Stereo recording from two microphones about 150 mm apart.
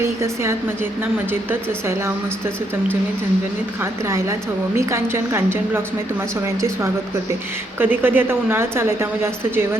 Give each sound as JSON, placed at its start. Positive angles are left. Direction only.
{"t": 0.0, "sound": "a woman's voice", "side_deg": -15}
{"t": 4.8, "sound": "a woman's voice", "side_deg": -20}
{"t": 7.8, "sound": "a woman's voice", "side_deg": -15}